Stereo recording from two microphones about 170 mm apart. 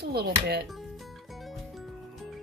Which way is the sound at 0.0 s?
70° right (ahead or behind).